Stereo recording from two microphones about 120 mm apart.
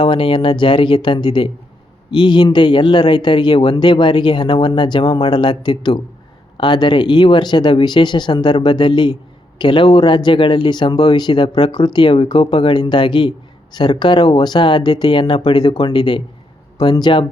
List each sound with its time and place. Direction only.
0.0 s speech: 45° left (ahead or behind)